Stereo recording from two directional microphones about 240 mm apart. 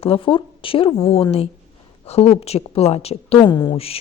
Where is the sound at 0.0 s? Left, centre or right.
Left.